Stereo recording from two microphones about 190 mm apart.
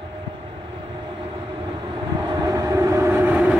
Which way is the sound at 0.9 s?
25° right (ahead or behind).